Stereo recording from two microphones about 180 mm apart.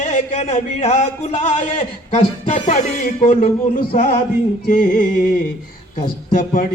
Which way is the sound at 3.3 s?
35° left (ahead or behind).